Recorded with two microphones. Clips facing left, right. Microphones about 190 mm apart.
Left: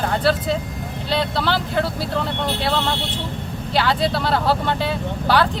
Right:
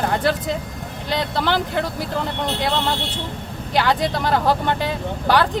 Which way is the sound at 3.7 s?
15° right (ahead or behind).